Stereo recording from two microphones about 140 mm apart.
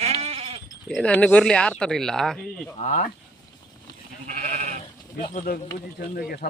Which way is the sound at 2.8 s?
55° left (ahead or behind).